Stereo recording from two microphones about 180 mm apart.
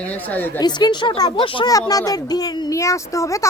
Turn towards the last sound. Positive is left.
turn(degrees=15)  # may be behind; listen again after turning